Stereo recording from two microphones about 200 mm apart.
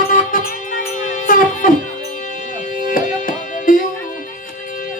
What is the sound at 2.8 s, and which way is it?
Music, 45° left (ahead or behind).